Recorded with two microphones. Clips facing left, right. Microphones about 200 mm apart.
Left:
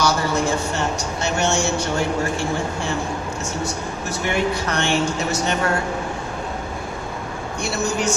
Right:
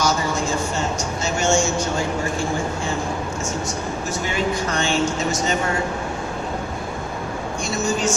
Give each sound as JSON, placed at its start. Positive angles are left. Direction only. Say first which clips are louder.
{"t": 0.0, "sound": "a sound", "louder": "left 2 dB", "side_deg": 65}
{"t": 4.3, "sound": "speech", "louder": "left 2 dB", "side_deg": 65}
{"t": 7.6, "sound": "a man's voice", "louder": "even", "side_deg": 65}